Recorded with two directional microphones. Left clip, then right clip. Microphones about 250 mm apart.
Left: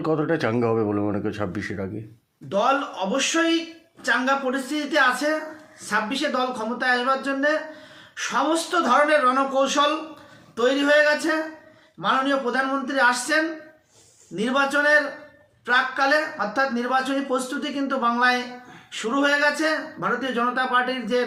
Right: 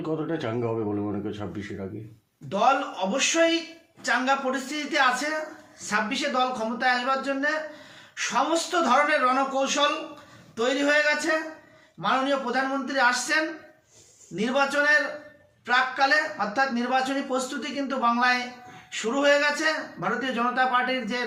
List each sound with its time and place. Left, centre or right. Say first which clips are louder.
0.0 s a man's voice: left 6 dB; left
2.5 s a man's voice: left 1 dB; centre